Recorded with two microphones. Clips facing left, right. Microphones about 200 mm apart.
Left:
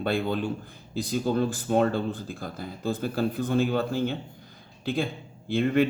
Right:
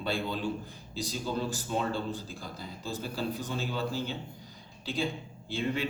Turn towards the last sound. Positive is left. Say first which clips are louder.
# left 9 dB
turn(degrees=55)  # may be behind; listen again after turning